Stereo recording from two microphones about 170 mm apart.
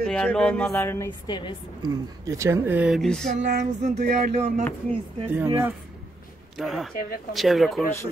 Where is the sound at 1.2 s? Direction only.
25° left (ahead or behind).